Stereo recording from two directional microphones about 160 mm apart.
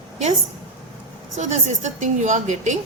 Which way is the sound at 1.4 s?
45° right (ahead or behind).